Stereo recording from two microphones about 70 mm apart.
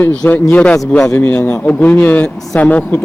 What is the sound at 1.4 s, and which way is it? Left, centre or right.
A man's voice, left.